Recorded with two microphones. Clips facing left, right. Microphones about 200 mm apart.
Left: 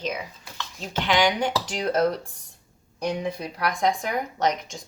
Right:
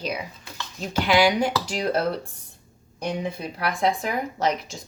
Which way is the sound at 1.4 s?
35° right (ahead or behind).